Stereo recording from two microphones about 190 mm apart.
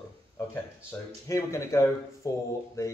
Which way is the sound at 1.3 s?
15° left (ahead or behind).